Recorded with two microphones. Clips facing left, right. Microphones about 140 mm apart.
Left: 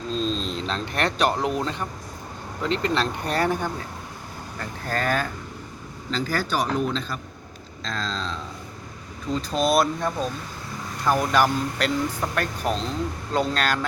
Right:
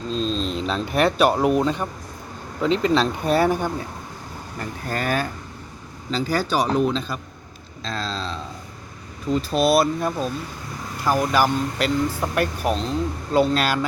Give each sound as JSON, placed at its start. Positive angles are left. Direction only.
{"t": 0.1, "sound": "speech", "side_deg": 0}
{"t": 4.9, "sound": "speech", "side_deg": -15}
{"t": 6.3, "sound": "speech", "side_deg": -15}
{"t": 6.7, "sound": "a man's voice", "side_deg": -30}
{"t": 7.9, "sound": "speech", "side_deg": -10}